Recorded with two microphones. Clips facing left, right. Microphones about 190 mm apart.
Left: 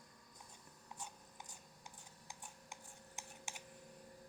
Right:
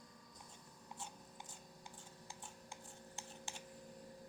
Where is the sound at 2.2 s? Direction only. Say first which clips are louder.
Even; 20° left (ahead or behind).